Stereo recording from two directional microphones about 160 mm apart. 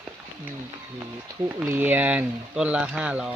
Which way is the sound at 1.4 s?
15° right (ahead or behind).